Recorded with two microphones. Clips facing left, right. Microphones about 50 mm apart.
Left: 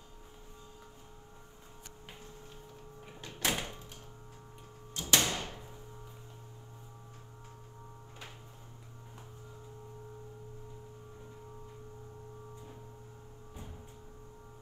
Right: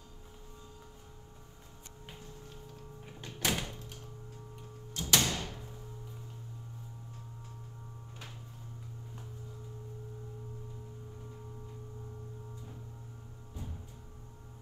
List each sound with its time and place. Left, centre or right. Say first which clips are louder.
3.4 s thunk: even; left
4.9 s door: even; left